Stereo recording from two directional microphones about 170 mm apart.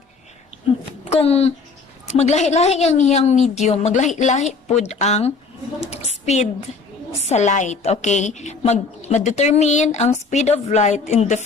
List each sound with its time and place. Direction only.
1.1 s a woman's voice: 35° left (ahead or behind)